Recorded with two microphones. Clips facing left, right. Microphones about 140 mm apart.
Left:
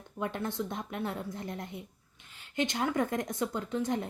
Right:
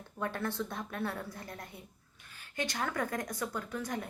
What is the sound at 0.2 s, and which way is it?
A woman's voice, 20° left (ahead or behind).